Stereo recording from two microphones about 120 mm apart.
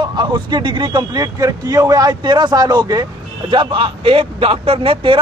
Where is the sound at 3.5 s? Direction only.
45° right (ahead or behind).